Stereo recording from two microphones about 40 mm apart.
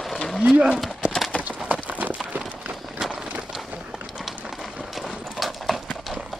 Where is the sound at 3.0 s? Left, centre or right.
Centre.